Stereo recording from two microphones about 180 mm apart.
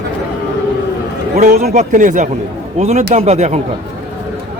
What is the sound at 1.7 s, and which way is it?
A man's voice, 45° right (ahead or behind).